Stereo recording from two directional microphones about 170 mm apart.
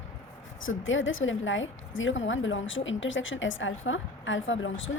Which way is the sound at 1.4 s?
90° left.